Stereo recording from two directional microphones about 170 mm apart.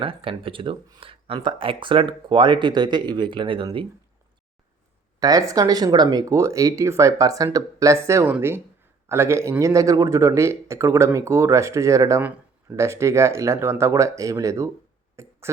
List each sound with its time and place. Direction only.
0.0 s speech: 30° right (ahead or behind)
5.2 s a man's voice: 20° right (ahead or behind)
15.1 s a sound: 15° right (ahead or behind)